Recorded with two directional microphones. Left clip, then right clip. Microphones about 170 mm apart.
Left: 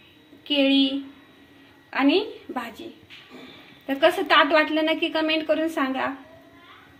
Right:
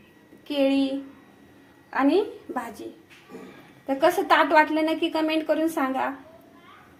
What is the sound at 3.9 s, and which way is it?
A woman's voice, 15° right (ahead or behind).